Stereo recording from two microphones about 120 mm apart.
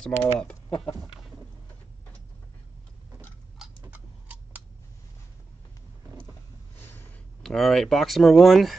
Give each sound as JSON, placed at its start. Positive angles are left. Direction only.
{"t": 0.2, "sound": "speech", "side_deg": 10}
{"t": 3.8, "sound": "tick-tock", "side_deg": -15}
{"t": 6.8, "sound": "a sound", "side_deg": 20}
{"t": 7.4, "sound": "speech", "side_deg": 0}